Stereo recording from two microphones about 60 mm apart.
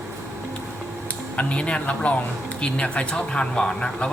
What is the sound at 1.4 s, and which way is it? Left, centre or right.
Speech, left.